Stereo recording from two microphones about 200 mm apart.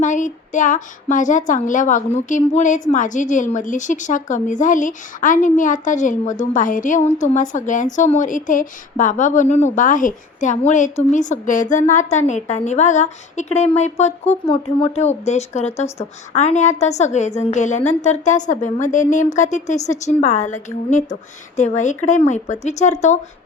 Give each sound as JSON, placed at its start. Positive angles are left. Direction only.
{"t": 0.0, "sound": "a woman's voice", "side_deg": 40}